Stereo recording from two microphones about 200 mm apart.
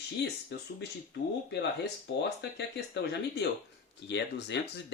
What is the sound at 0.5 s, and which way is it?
Speech, 55° left (ahead or behind).